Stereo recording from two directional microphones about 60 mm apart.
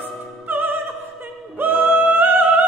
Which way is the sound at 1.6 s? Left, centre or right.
Right.